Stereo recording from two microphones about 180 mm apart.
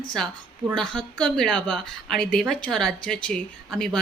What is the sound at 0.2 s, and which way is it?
A woman's voice, centre (ahead or behind).